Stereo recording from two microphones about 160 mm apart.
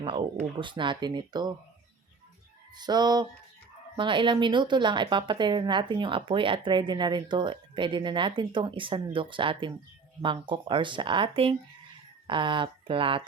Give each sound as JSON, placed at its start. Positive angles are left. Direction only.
{"t": 0.6, "sound": "a woman's voice", "side_deg": -30}
{"t": 2.7, "sound": "a woman's voice", "side_deg": -25}